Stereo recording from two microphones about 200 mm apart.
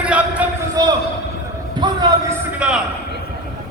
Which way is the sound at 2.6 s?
5° right (ahead or behind).